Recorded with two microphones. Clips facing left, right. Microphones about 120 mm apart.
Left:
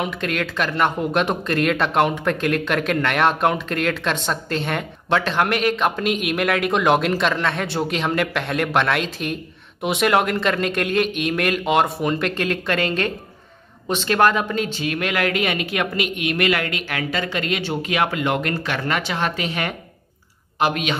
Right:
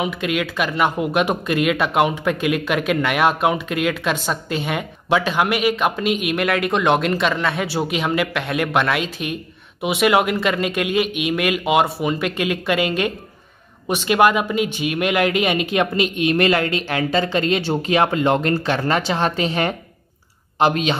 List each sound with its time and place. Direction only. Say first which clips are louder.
0.0 s speech: right 2 dB; 5° right (ahead or behind); by 21.0 s 30° right (ahead or behind)